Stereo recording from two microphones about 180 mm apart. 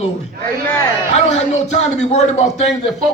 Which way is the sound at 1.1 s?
40° left (ahead or behind).